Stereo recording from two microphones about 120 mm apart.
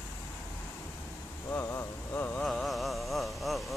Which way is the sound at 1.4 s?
20° left (ahead or behind).